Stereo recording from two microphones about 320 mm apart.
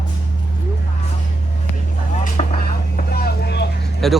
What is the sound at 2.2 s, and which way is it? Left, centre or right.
Vehicle, left.